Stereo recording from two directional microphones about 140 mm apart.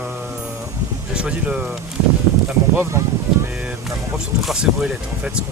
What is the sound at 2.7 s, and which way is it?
Speech, 20° right (ahead or behind).